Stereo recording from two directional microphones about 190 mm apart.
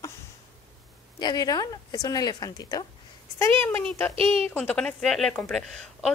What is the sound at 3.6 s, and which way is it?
A woman's voice, 10° left (ahead or behind).